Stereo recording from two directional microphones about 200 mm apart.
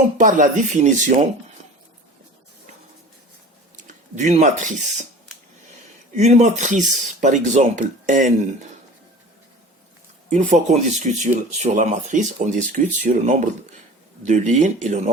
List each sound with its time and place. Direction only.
0.2 s speech: 40° right (ahead or behind)
3.8 s a sound: 40° right (ahead or behind)
6.1 s speech: 35° right (ahead or behind)
10.2 s speech: 35° right (ahead or behind)